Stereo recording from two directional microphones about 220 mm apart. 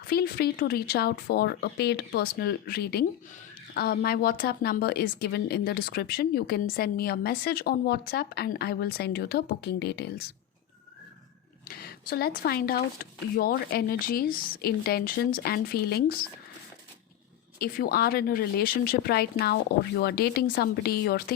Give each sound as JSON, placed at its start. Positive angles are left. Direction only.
{"t": 0.0, "sound": "a woman's voice", "side_deg": 45}
{"t": 11.6, "sound": "a woman's voice", "side_deg": 45}
{"t": 17.6, "sound": "a woman's voice", "side_deg": 45}